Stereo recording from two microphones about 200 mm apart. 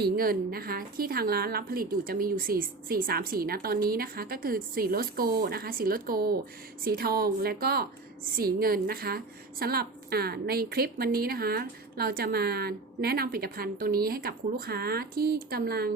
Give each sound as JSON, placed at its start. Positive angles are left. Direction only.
{"t": 0.0, "sound": "a woman's voice", "side_deg": -50}